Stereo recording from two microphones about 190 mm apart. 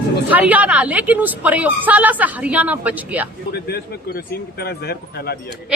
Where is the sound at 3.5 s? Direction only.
55° left (ahead or behind).